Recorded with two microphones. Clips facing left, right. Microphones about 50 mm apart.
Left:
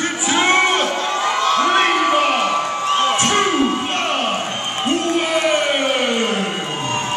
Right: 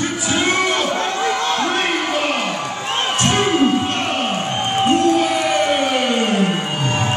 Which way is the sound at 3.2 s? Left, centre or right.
Centre.